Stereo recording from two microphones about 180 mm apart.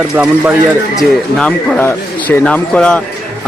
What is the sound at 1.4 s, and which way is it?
Speech, 5° left (ahead or behind).